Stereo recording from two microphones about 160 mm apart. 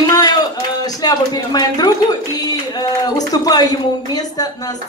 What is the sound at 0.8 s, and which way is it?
Speech, 25° left (ahead or behind).